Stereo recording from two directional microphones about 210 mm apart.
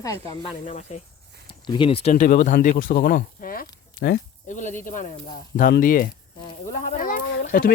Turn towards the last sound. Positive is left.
turn(degrees=40)  # may be behind; listen again after turning